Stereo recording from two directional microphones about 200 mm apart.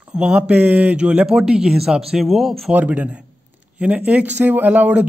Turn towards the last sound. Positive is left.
turn(degrees=-5)  # may be behind; listen again after turning